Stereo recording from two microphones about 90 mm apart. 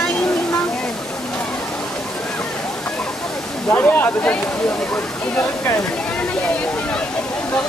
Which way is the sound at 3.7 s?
20° left (ahead or behind).